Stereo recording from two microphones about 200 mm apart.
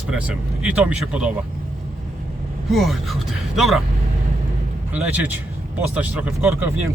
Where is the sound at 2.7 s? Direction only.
Centre (ahead or behind).